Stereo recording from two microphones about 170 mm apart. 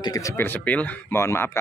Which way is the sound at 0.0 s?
20° left (ahead or behind).